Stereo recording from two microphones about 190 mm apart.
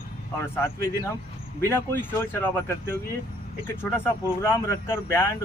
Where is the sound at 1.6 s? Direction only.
10° left (ahead or behind).